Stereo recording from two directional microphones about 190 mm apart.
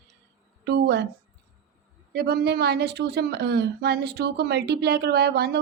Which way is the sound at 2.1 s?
55° right (ahead or behind).